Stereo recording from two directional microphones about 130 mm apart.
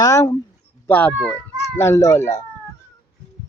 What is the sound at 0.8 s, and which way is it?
Speech, 10° left (ahead or behind).